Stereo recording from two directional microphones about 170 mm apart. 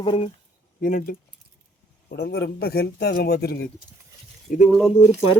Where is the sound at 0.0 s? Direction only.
30° left (ahead or behind).